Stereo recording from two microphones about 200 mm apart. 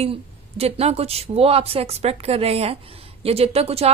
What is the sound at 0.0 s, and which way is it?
Speech, 30° right (ahead or behind).